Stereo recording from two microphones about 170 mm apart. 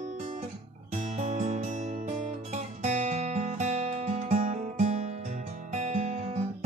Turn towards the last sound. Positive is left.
turn(degrees=-40)  # may be behind; listen again after turning